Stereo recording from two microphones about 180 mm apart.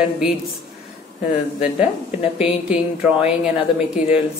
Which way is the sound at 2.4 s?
5° right (ahead or behind).